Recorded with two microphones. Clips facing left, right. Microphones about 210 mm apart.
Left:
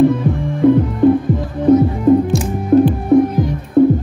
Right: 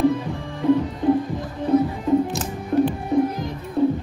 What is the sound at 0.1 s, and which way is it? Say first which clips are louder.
Music: left 8 dB; 55° left (ahead or behind).